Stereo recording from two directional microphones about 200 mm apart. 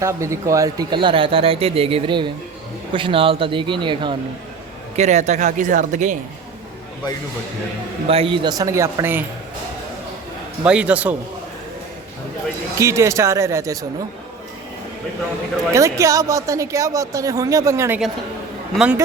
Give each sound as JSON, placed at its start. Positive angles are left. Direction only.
{"t": 0.0, "sound": "speech", "side_deg": -15}
{"t": 4.9, "sound": "speech", "side_deg": -35}
{"t": 8.0, "sound": "a woman's voice", "side_deg": -30}
{"t": 10.6, "sound": "a woman's voice", "side_deg": -5}
{"t": 12.8, "sound": "a woman's voice", "side_deg": -15}
{"t": 15.7, "sound": "a woman's voice", "side_deg": -15}